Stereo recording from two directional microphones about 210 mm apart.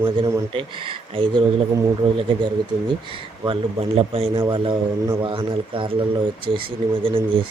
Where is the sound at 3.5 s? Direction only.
25° right (ahead or behind).